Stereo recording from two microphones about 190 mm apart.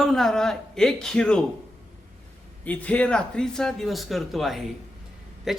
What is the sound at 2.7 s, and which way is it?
Speech, 10° left (ahead or behind).